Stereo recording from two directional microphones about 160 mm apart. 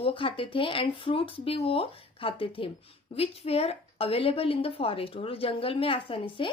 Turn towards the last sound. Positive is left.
turn(degrees=35)  # may be behind; listen again after turning